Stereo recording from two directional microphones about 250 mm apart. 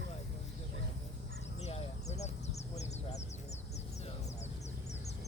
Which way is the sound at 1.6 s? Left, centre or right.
Left.